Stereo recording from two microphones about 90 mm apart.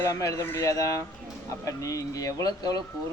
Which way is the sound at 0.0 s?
40° left (ahead or behind).